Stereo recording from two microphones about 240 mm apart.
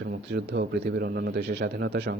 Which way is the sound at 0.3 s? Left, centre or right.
Right.